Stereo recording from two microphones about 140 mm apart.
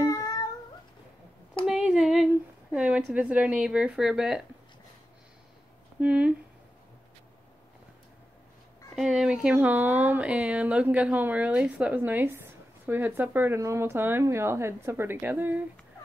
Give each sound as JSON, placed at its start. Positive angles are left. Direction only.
{"t": 0.0, "sound": "cat", "side_deg": 25}
{"t": 1.7, "sound": "a sound", "side_deg": -5}
{"t": 2.7, "sound": "speech", "side_deg": -10}
{"t": 5.9, "sound": "speech", "side_deg": -10}
{"t": 8.9, "sound": "speech", "side_deg": -5}